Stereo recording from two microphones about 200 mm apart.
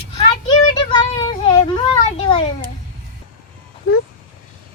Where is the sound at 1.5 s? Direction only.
25° left (ahead or behind).